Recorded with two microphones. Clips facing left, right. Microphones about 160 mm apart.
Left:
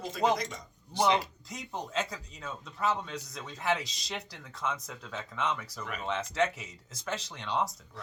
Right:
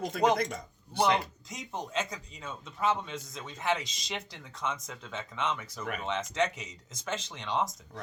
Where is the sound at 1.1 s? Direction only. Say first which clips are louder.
Left 1 dB; centre (ahead or behind).